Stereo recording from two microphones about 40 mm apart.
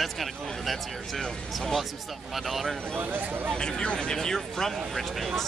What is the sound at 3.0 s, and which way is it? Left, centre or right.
Speech, right.